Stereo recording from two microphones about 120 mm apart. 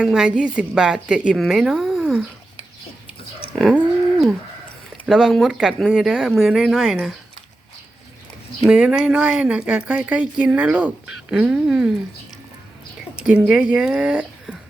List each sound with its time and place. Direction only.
0.0 s a woman's voice: 5° right (ahead or behind)
5.0 s a woman's voice: 5° right (ahead or behind)
8.6 s speech: 5° right (ahead or behind)
13.2 s speech: 10° right (ahead or behind)